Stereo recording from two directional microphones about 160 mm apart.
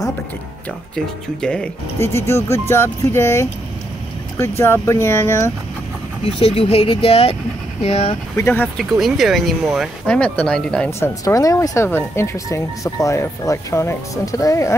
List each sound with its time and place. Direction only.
0.9 s speech: 5° left (ahead or behind)
2.0 s speech: 15° left (ahead or behind)
6.4 s speech: 40° left (ahead or behind)
8.4 s speech: 15° left (ahead or behind)
9.0 s speech: centre (ahead or behind)
10.9 s speech: 20° left (ahead or behind)